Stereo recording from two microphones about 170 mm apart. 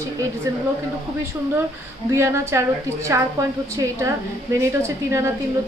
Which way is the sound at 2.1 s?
15° right (ahead or behind).